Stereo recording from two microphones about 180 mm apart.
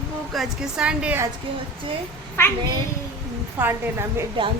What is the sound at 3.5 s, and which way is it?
Speech, 10° right (ahead or behind).